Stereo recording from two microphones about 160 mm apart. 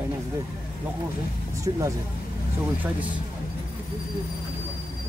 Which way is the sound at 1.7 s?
30° right (ahead or behind).